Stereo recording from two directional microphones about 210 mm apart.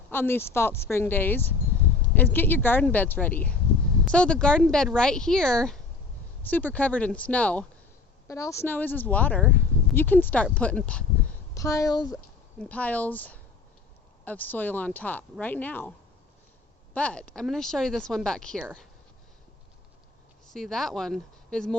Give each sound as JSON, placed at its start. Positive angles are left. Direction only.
{"t": 0.1, "sound": "a woman's voice", "side_deg": 10}
{"t": 16.9, "sound": "speech", "side_deg": 5}
{"t": 20.5, "sound": "speech", "side_deg": 0}